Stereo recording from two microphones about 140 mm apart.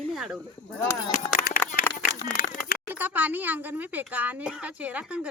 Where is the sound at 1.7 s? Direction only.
75° left (ahead or behind).